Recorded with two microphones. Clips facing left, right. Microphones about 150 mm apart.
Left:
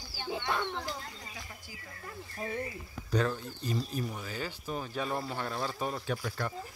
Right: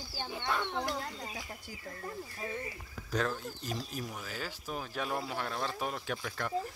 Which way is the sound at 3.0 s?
Centre (ahead or behind).